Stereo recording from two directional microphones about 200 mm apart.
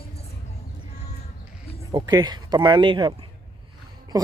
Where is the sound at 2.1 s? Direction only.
20° right (ahead or behind).